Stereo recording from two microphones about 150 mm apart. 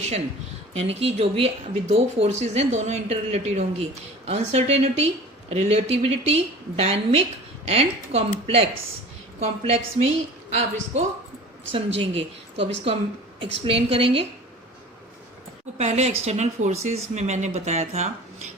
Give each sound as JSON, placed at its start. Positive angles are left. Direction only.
{"t": 0.7, "sound": "speech", "side_deg": -45}
{"t": 11.7, "sound": "speech", "side_deg": -40}
{"t": 13.4, "sound": "speech", "side_deg": -35}
{"t": 15.8, "sound": "speech", "side_deg": -45}